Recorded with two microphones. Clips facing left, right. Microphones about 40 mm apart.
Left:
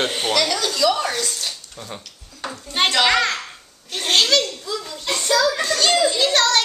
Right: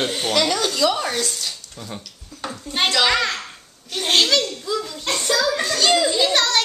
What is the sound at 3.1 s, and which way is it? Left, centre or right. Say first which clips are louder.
A child's voice: left 2 dB; centre.